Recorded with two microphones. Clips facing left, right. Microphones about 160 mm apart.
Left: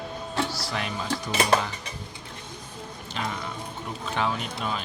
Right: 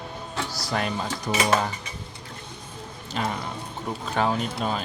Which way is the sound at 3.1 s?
45° right (ahead or behind).